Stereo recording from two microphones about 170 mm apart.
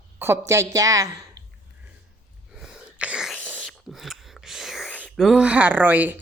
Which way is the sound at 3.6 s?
Centre (ahead or behind).